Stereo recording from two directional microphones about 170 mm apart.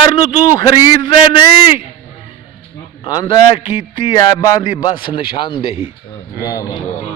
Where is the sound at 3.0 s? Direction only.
25° left (ahead or behind).